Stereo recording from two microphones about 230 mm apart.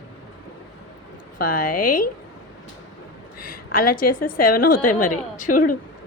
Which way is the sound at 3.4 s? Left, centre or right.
Left.